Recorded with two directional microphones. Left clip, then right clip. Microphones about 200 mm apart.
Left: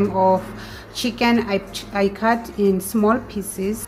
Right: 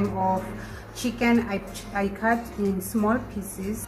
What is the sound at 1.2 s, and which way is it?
A woman's voice, 60° left (ahead or behind).